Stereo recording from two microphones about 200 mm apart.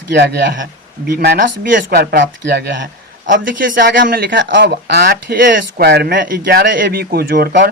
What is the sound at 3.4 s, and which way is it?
Speech, 45° right (ahead or behind).